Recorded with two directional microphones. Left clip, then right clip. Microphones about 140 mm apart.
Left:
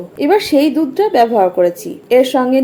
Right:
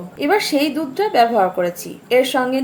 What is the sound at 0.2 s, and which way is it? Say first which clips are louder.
A woman's voice: left 5 dB; 30° left (ahead or behind).